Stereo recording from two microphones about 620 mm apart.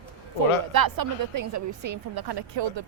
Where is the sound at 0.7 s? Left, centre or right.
Right.